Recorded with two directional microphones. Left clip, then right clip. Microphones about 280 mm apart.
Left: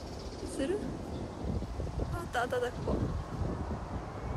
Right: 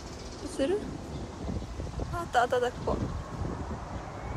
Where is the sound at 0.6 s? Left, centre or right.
Centre.